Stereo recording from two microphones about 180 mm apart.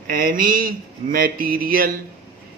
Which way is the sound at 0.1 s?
50° right (ahead or behind).